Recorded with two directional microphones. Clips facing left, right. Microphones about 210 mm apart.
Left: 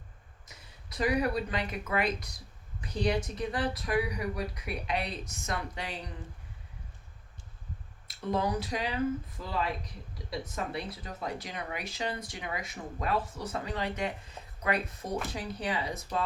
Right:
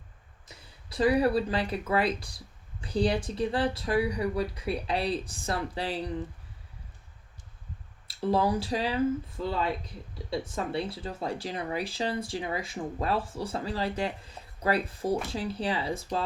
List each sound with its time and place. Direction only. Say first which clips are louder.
0.4 s speech: right 3 dB; 30° right (ahead or behind)
8.0 s speech: right 5 dB; 30° right (ahead or behind)